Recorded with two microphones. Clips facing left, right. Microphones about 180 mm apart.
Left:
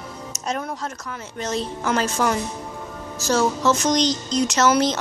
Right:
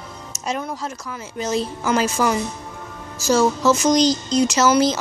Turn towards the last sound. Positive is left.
turn(degrees=-5)  # may be behind; listen again after turning